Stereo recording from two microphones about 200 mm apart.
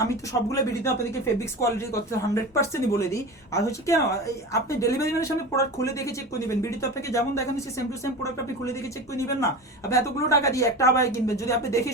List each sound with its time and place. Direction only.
0.5 s speech: 15° left (ahead or behind)